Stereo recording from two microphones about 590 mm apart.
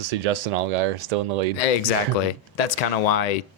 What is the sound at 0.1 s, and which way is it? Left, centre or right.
Speech, right.